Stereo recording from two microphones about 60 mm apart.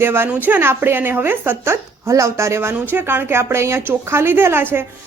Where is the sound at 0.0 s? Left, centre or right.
Right.